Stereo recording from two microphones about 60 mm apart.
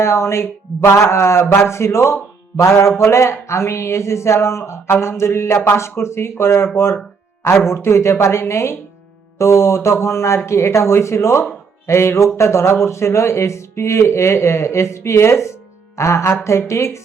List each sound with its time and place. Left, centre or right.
0.0 s speech: left
7.7 s speech: left